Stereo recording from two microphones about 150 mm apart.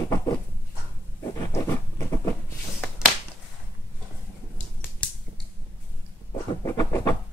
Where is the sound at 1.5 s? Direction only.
20° left (ahead or behind).